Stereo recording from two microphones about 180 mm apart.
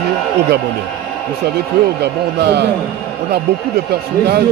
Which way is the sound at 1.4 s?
65° right (ahead or behind).